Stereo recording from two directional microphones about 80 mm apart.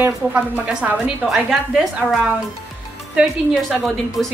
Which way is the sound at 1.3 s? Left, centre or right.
Centre.